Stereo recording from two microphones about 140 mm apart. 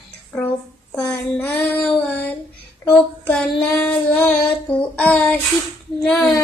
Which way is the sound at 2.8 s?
15° left (ahead or behind).